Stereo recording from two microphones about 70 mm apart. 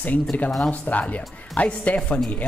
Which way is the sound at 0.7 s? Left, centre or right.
Left.